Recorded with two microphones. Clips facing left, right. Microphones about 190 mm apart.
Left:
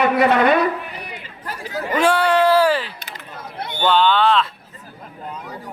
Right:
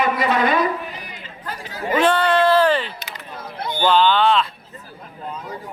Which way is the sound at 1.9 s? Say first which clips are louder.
Left 1 dB; 10° left (ahead or behind).